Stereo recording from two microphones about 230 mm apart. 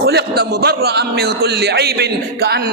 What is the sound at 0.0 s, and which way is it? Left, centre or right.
A man's voice, right.